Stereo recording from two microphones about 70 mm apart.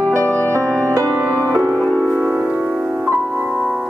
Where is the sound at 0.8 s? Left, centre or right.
Right.